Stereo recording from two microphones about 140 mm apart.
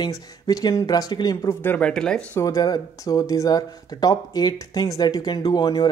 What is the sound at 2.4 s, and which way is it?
Speech, 25° left (ahead or behind).